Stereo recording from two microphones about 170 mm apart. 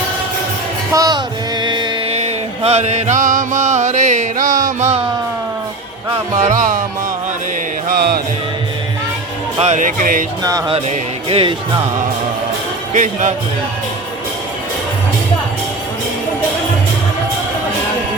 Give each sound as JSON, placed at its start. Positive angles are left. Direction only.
{"t": 0.9, "sound": "music", "side_deg": -20}
{"t": 2.1, "sound": "music", "side_deg": -40}
{"t": 6.3, "sound": "music", "side_deg": -45}
{"t": 7.9, "sound": "music", "side_deg": -65}
{"t": 9.6, "sound": "music", "side_deg": -45}
{"t": 10.4, "sound": "music", "side_deg": -20}
{"t": 10.8, "sound": "music", "side_deg": -35}
{"t": 12.9, "sound": "music", "side_deg": -45}